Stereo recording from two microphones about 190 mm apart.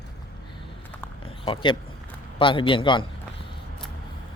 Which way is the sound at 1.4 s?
25° left (ahead or behind).